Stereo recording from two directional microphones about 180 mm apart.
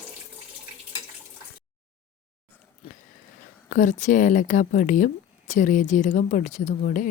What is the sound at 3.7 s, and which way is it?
Speech, 45° left (ahead or behind).